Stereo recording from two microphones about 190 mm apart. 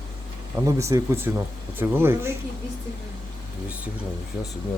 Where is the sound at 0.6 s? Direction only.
15° right (ahead or behind).